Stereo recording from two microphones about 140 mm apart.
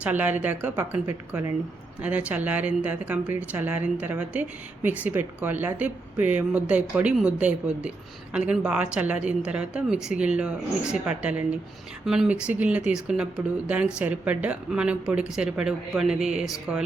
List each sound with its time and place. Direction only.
0.0 s speech: 10° right (ahead or behind)